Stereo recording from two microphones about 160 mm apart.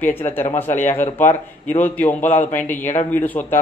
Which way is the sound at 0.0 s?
15° left (ahead or behind).